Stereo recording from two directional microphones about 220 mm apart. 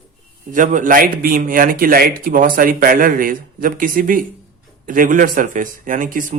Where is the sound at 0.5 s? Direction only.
35° right (ahead or behind).